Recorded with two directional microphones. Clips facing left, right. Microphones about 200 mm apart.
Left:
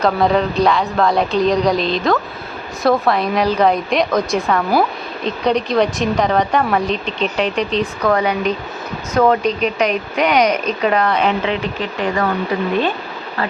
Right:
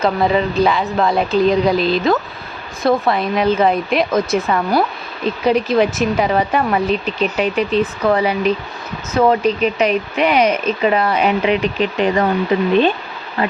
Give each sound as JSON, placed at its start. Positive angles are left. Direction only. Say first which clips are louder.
{"t": 0.0, "sound": "a woman's voice", "louder": "left 1 dB", "side_deg": 0}